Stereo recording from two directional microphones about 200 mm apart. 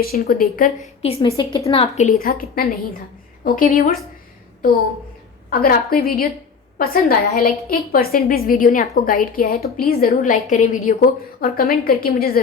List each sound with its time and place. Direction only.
0.0 s a woman's voice: 50° left (ahead or behind)
1.0 s a woman's voice: 30° left (ahead or behind)
5.5 s a woman's voice: 45° left (ahead or behind)